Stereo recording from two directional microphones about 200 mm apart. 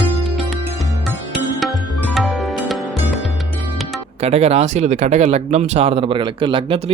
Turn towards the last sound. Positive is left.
turn(degrees=-25)  # may be behind; listen again after turning